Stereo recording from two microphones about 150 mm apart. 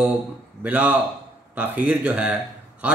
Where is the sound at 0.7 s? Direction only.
10° right (ahead or behind).